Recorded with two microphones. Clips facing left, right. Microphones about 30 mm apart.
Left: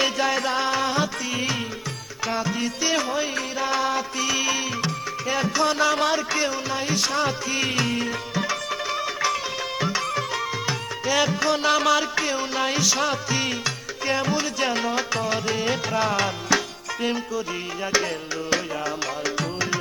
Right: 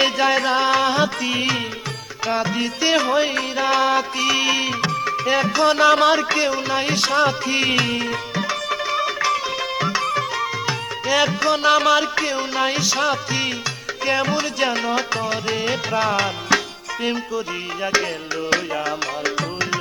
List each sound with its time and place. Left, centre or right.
0.0 s music: right
6.7 s music: right; by 17.4 s centre
18.5 s music: right